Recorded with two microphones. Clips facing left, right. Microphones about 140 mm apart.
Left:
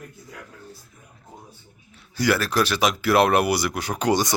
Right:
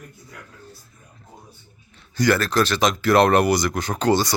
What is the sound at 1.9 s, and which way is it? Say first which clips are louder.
Speech: right 2 dB; 10° left (ahead or behind).